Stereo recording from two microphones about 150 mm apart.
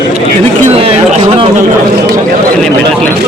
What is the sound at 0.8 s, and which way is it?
Chatter, 40° right (ahead or behind).